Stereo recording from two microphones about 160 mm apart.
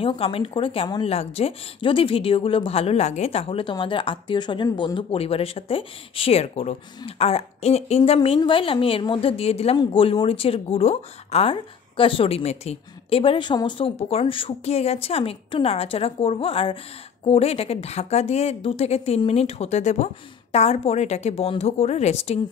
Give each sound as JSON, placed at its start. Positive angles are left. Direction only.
{"t": 0.0, "sound": "speech", "side_deg": 35}